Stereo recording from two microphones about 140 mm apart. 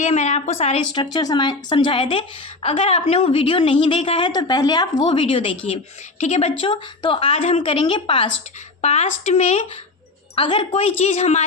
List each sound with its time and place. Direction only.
0.0 s a woman's voice: 60° left (ahead or behind)
0.9 s a woman's voice: 30° left (ahead or behind)
4.9 s a woman's voice: 40° left (ahead or behind)
6.1 s a woman's voice: 55° left (ahead or behind)
8.8 s a woman's voice: 50° left (ahead or behind)
10.3 s a woman's voice: 40° left (ahead or behind)